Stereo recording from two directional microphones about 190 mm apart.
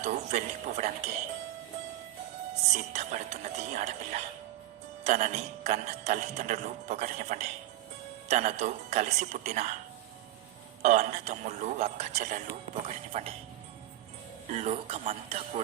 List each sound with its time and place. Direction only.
0.0 s speech: 35° right (ahead or behind)
2.7 s speech: 35° right (ahead or behind)
10.8 s speech: 40° right (ahead or behind)
13.1 s speech: 30° right (ahead or behind)
14.5 s speech: 30° right (ahead or behind)